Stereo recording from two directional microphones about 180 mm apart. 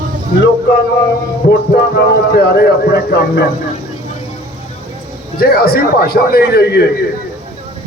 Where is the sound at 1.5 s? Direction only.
65° left (ahead or behind).